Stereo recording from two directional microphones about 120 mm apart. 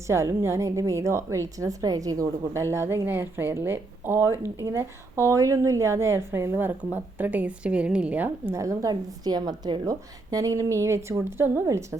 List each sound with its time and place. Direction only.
0.1 s a woman's voice: 20° right (ahead or behind)
8.6 s a woman's voice: 30° right (ahead or behind)